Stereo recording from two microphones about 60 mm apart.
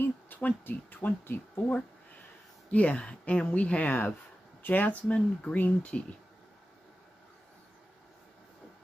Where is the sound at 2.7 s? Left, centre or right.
Left.